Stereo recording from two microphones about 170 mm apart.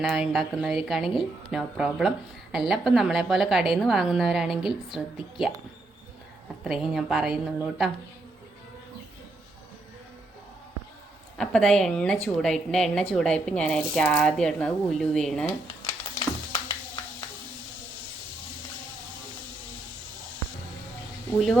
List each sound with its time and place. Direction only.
0.0 s speech: centre (ahead or behind)
6.7 s speech: 5° right (ahead or behind)
11.3 s speech: 5° left (ahead or behind)
15.8 s a sound: 30° left (ahead or behind)